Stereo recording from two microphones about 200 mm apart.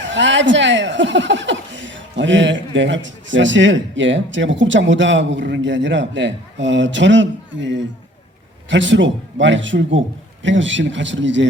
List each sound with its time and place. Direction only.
0.0 s speech: 65° right (ahead or behind)